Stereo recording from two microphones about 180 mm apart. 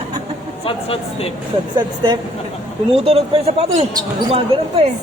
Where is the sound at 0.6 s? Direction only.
30° left (ahead or behind).